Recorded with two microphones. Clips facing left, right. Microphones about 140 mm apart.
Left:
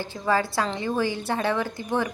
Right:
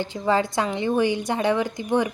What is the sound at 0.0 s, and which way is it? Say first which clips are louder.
Speech: right 2 dB; 20° right (ahead or behind).